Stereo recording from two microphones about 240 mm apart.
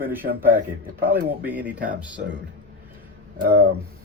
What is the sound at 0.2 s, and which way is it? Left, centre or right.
Speech, right.